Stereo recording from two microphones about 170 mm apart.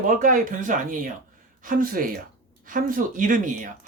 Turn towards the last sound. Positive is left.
turn(degrees=-50)  # may be behind; listen again after turning